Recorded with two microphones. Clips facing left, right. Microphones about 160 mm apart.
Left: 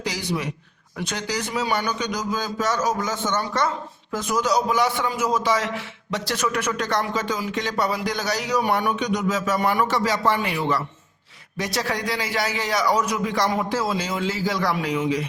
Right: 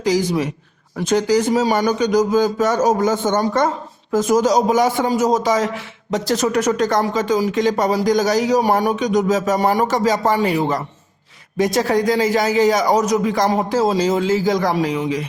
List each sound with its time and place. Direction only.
0.0 s a man's voice: 45° right (ahead or behind)